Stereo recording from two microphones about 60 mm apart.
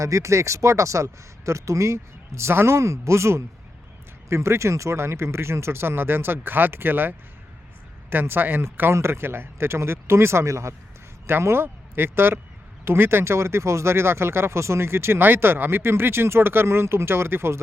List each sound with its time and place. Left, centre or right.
0.0 s speech: right
11.3 s speech: right